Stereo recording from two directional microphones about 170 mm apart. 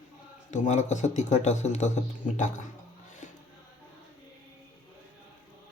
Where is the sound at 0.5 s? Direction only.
45° left (ahead or behind).